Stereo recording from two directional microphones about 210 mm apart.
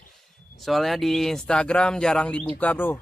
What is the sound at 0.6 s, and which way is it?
Speech, centre (ahead or behind).